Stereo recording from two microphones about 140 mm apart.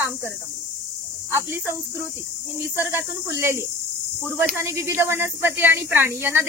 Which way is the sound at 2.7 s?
15° right (ahead or behind).